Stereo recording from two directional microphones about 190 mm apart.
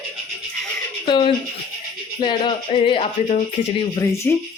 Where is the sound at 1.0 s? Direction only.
25° left (ahead or behind).